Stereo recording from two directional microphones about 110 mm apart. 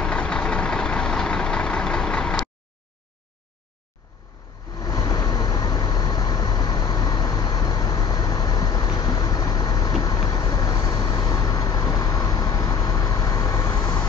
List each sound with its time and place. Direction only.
0.0 s vehicle: 10° left (ahead or behind)
4.7 s vehicle: 35° left (ahead or behind)